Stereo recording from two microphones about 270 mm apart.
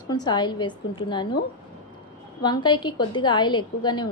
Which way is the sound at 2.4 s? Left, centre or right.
Centre.